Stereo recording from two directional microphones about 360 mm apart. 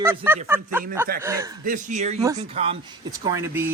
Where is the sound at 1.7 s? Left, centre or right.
Centre.